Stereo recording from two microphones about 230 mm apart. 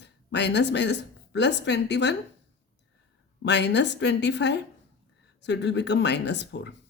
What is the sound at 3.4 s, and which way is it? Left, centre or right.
A woman's voice, left.